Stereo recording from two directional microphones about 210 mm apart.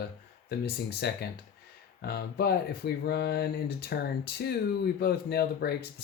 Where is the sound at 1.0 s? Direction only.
50° left (ahead or behind).